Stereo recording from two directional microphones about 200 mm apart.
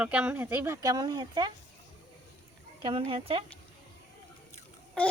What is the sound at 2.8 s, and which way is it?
Speech, 25° right (ahead or behind).